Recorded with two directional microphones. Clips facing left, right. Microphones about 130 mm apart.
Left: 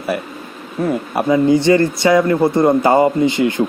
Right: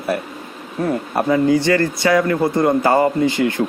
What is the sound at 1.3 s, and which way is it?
A man's voice, 20° left (ahead or behind).